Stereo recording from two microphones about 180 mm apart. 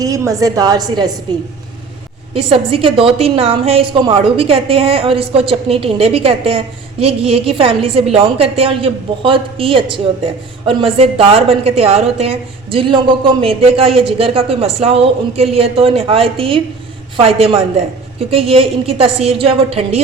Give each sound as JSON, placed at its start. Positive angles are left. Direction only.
{"t": 0.0, "sound": "a woman's voice", "side_deg": -20}
{"t": 2.3, "sound": "a man's voice", "side_deg": -30}